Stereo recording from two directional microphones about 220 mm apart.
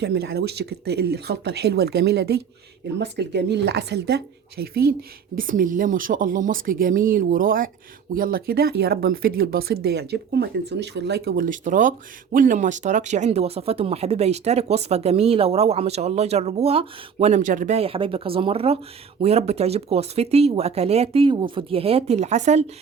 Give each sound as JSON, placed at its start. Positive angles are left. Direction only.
{"t": 0.0, "sound": "speech", "side_deg": -50}